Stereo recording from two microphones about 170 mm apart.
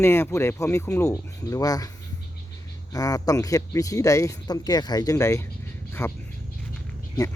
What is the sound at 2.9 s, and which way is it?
Speech, 20° left (ahead or behind).